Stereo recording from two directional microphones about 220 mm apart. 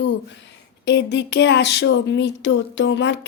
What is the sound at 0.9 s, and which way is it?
Speech, 50° left (ahead or behind).